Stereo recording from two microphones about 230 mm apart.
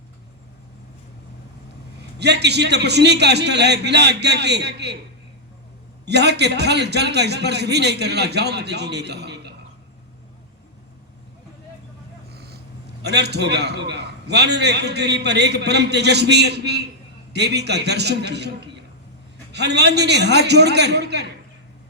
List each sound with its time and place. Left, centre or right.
2.1 s a man's voice: right
6.1 s a man's voice: right
12.3 s a man's voice: right
19.5 s a man's voice: right